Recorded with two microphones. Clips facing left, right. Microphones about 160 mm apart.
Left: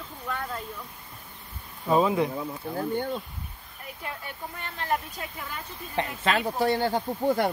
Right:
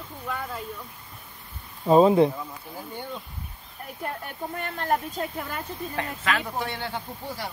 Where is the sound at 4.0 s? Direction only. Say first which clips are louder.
Right 5 dB; 50° right (ahead or behind).